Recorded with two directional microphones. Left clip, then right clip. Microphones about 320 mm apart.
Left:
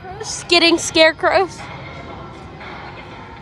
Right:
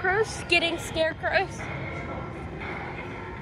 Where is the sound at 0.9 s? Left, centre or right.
Left.